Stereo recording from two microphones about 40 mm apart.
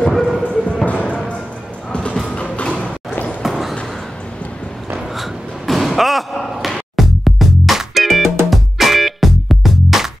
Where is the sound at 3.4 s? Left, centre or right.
Centre.